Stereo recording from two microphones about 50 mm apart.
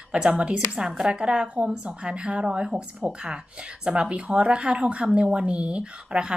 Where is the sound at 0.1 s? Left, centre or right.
Right.